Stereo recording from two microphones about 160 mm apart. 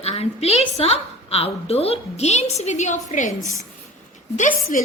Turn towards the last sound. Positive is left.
turn(degrees=55)  # may be behind; listen again after turning